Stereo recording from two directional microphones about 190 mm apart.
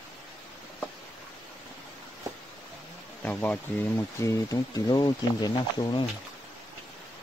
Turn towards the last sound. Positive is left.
turn(degrees=20)  # may be behind; listen again after turning